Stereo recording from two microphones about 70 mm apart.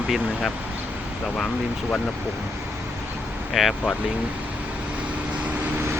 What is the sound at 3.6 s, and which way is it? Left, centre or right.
Speech, centre.